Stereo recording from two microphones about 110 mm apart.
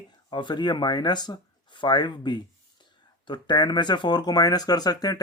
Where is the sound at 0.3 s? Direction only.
45° left (ahead or behind).